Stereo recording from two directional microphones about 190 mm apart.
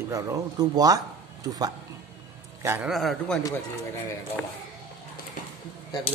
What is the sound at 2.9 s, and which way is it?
Speech, centre (ahead or behind).